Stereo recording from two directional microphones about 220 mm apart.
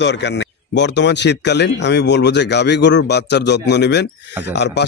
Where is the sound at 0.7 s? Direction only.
50° left (ahead or behind).